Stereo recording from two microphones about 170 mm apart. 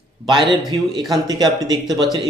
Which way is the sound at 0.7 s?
20° right (ahead or behind).